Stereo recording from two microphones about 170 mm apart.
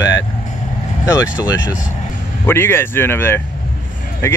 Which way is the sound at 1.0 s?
20° left (ahead or behind).